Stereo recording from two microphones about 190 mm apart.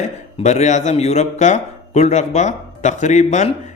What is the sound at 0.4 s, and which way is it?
A man's voice, 35° left (ahead or behind).